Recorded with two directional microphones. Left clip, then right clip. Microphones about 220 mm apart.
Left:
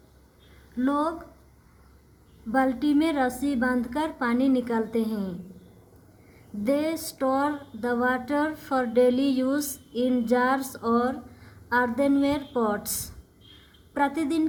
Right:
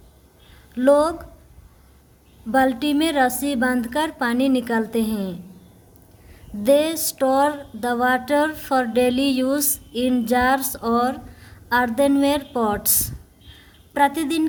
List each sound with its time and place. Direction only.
0.8 s music: 45° right (ahead or behind)
2.5 s music: 45° right (ahead or behind)
6.7 s music: 45° right (ahead or behind)